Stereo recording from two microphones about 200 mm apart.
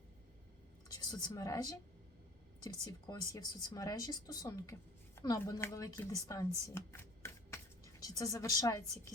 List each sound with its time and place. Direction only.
0.9 s speech: 20° left (ahead or behind)